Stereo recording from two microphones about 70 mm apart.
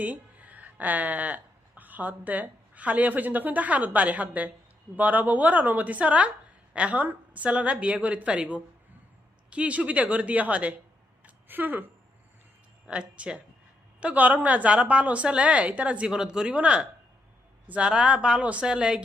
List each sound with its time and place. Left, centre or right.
0.0 s a woman's voice: right
12.9 s a woman's voice: centre